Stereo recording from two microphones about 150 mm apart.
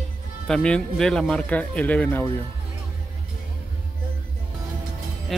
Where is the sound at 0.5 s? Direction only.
5° left (ahead or behind).